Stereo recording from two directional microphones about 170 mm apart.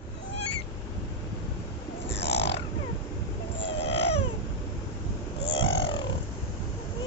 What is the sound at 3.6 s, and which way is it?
Baby cry, 90° left.